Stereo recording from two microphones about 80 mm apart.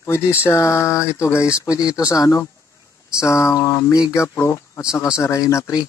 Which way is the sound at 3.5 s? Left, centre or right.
Left.